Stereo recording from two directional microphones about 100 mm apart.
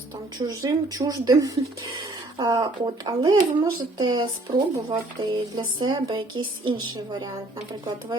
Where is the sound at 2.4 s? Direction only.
50° right (ahead or behind).